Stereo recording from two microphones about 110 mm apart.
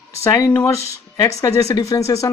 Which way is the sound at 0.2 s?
30° left (ahead or behind).